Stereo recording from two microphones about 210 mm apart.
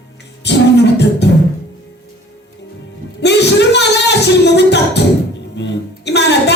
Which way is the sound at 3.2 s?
55° left (ahead or behind).